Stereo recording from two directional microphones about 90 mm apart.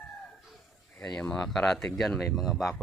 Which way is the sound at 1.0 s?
10° left (ahead or behind).